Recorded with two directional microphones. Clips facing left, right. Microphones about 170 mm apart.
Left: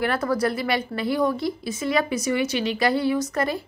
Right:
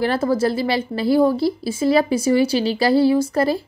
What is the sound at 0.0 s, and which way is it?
Speech, 30° right (ahead or behind).